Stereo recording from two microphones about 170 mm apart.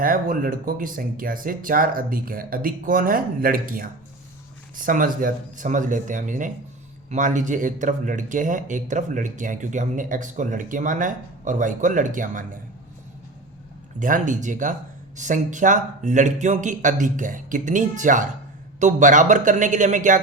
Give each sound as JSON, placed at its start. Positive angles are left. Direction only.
{"t": 0.0, "sound": "speech", "side_deg": -55}
{"t": 14.0, "sound": "speech", "side_deg": -50}